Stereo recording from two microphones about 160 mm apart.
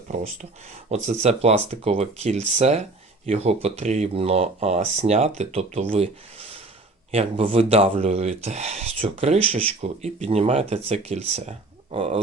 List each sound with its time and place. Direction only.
0.9 s speech: 40° right (ahead or behind)
7.1 s speech: 40° right (ahead or behind)